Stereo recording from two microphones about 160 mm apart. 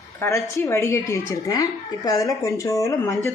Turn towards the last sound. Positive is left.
turn(degrees=20)  # may be behind; listen again after turning